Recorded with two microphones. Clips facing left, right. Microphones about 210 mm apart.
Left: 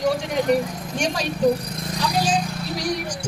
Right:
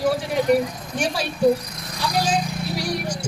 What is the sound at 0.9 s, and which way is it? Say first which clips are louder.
Speech: even; 5° right (ahead or behind).